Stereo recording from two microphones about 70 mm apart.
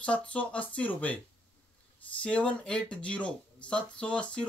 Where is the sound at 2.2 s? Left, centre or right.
Centre.